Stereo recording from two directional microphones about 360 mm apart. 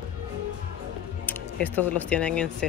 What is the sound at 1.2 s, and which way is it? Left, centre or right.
Speech, centre.